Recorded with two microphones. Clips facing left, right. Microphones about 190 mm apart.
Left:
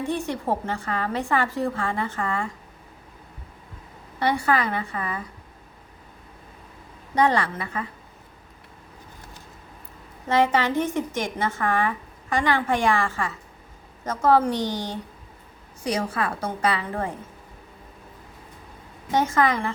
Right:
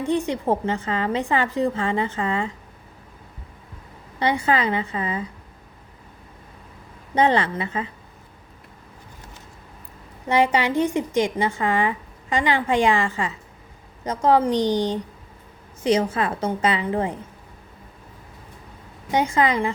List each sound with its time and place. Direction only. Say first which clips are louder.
0.0 s a woman's voice: right 4 dB; 15° right (ahead or behind)
4.2 s a woman's voice: right 1 dB; 20° right (ahead or behind)
7.2 s a woman's voice: right 2 dB; 20° right (ahead or behind)
10.2 s a woman's voice: right 1 dB; 15° right (ahead or behind)
19.1 s speech: right 1 dB; 15° right (ahead or behind)